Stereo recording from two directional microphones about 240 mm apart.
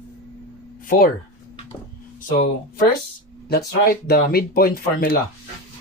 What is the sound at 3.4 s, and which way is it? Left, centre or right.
Speech, left.